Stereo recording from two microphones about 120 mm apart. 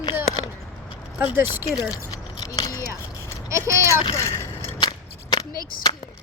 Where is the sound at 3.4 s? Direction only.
25° right (ahead or behind).